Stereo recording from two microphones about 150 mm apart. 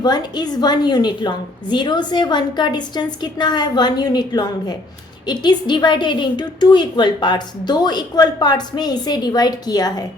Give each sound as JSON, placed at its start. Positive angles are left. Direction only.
{"t": 0.0, "sound": "a woman's voice", "side_deg": 30}